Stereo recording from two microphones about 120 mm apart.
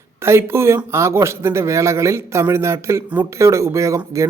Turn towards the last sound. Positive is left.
turn(degrees=-25)  # may be behind; listen again after turning